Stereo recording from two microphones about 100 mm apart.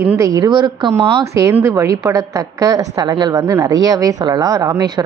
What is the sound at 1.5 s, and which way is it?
A woman's voice, 30° right (ahead or behind).